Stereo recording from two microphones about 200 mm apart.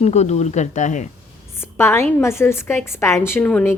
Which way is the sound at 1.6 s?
10° left (ahead or behind).